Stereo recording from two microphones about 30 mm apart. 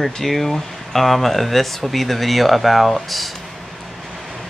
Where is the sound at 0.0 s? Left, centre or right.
Centre.